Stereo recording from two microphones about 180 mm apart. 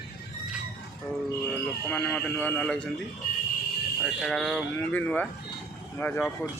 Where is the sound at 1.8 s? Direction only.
10° left (ahead or behind).